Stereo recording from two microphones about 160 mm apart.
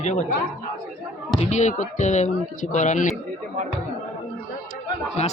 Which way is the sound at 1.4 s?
45° left (ahead or behind).